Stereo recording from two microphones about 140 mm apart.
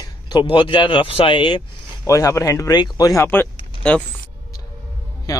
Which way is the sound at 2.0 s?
20° left (ahead or behind).